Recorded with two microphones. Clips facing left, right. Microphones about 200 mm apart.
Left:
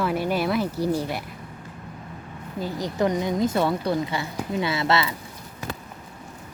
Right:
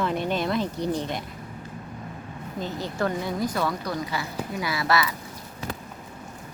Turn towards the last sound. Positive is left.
turn(degrees=25)  # may be behind; listen again after turning